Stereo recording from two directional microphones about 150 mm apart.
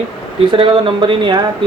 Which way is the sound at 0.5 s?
35° right (ahead or behind).